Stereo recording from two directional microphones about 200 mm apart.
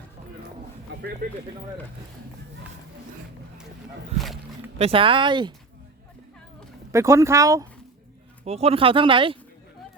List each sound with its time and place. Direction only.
1.2 s speech: 45° right (ahead or behind)
4.8 s speech: 25° right (ahead or behind)
6.9 s speech: 15° right (ahead or behind)
8.4 s speech: 30° right (ahead or behind)